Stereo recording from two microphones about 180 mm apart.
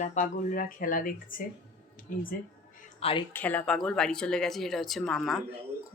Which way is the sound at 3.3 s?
10° left (ahead or behind).